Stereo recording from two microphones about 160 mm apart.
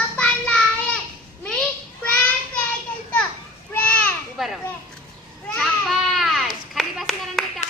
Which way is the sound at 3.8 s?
5° left (ahead or behind).